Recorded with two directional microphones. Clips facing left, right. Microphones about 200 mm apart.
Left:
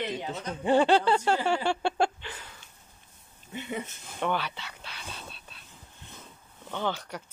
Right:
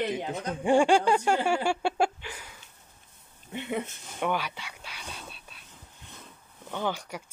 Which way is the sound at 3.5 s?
60° right (ahead or behind).